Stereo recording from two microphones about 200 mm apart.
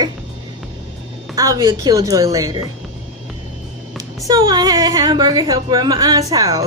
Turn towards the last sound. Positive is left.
turn(degrees=-20)  # may be behind; listen again after turning